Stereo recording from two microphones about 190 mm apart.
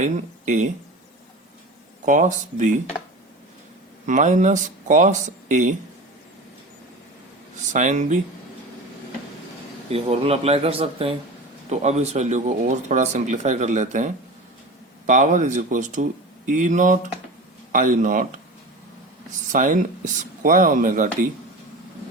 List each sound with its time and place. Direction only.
0.0 s speech: 40° right (ahead or behind)
2.0 s speech: 40° right (ahead or behind)
4.0 s speech: 40° right (ahead or behind)
7.7 s speech: 40° right (ahead or behind)
9.9 s speech: 30° right (ahead or behind)
19.5 s speech: 40° right (ahead or behind)